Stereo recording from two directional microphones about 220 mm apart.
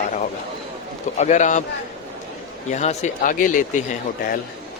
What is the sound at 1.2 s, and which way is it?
Speech, 30° left (ahead or behind).